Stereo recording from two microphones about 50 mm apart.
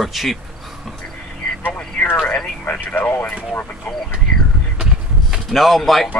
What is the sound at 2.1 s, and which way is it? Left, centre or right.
Speech, centre.